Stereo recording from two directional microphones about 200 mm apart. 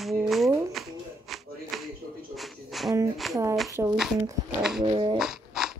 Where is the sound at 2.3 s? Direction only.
Centre (ahead or behind).